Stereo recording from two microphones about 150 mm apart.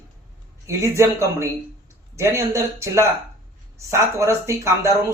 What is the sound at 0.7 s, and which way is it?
A man's voice, 20° right (ahead or behind).